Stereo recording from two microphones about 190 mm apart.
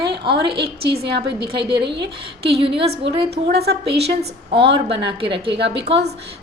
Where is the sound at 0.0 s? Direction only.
60° right (ahead or behind).